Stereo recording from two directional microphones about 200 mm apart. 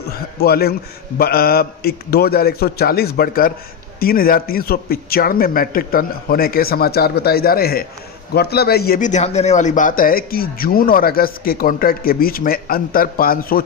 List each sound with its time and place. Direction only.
0.4 s a man's voice: 50° left (ahead or behind)